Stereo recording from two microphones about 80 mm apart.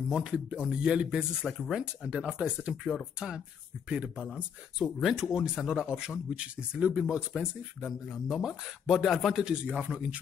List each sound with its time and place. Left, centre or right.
0.1 s a man's voice: centre
9.7 s speech: centre